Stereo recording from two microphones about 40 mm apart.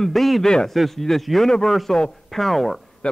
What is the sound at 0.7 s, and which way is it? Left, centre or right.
A man's voice, centre.